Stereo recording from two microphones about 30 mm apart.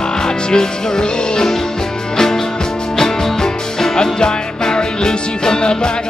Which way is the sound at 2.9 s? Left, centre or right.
Centre.